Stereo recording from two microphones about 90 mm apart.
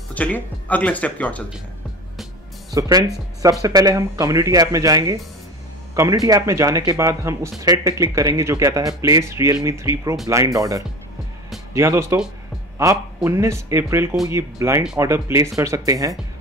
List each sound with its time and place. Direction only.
0.1 s speech: 15° left (ahead or behind)
2.7 s speech: 40° right (ahead or behind)
13.2 s speech: 30° right (ahead or behind)